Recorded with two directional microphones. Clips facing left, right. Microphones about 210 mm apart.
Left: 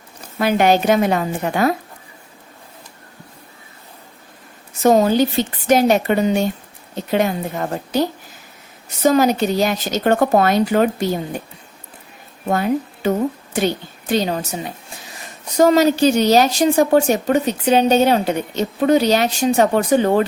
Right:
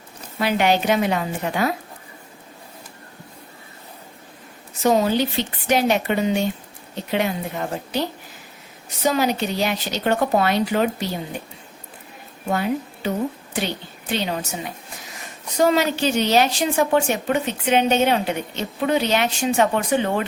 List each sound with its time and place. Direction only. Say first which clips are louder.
0.3 s speech: left 4 dB; 45° left (ahead or behind)
4.8 s speech: left 5 dB; 45° left (ahead or behind)
9.0 s speech: left 6 dB; 45° left (ahead or behind)
12.5 s a woman's voice: left 4 dB; 50° left (ahead or behind)
15.5 s a woman's voice: left 6 dB; 40° left (ahead or behind)